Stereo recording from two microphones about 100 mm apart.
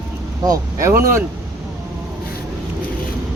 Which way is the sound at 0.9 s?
20° right (ahead or behind).